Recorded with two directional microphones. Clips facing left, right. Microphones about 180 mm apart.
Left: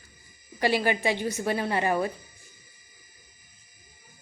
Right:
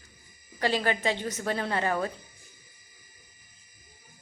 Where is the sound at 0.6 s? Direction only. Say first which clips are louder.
Left 2 dB; 10° left (ahead or behind).